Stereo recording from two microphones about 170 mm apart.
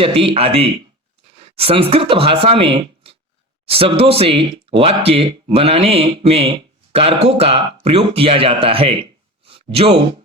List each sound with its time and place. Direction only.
0.0 s speech: 35° right (ahead or behind)